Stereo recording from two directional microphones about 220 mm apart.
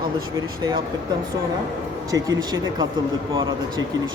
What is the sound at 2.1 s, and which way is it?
A woman's voice, 15° right (ahead or behind).